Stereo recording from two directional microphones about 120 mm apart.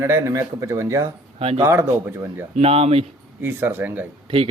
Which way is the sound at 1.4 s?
55° right (ahead or behind).